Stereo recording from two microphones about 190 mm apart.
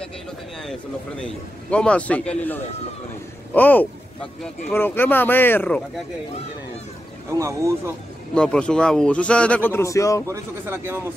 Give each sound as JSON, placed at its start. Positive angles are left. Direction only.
{"t": 1.2, "sound": "a man's voice", "side_deg": 5}
{"t": 7.2, "sound": "speech", "side_deg": -15}
{"t": 8.4, "sound": "a man's voice", "side_deg": 5}
{"t": 10.2, "sound": "speech", "side_deg": -15}